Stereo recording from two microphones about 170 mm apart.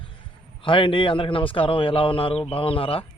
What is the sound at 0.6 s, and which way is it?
A man's voice, 30° left (ahead or behind).